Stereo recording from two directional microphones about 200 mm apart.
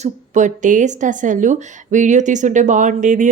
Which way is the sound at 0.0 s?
40° right (ahead or behind).